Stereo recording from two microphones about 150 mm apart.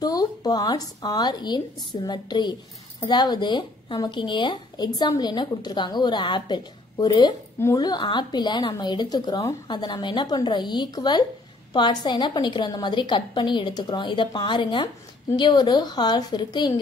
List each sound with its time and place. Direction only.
0.0 s a woman's voice: 25° left (ahead or behind)